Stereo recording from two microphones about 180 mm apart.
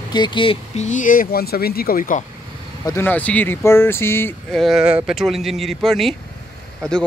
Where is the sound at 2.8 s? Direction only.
15° left (ahead or behind).